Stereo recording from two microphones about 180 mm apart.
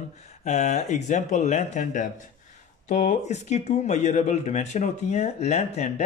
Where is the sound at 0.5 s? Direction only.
40° left (ahead or behind).